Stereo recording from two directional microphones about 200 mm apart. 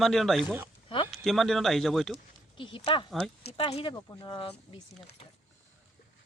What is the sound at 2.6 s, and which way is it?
Speech, 25° left (ahead or behind).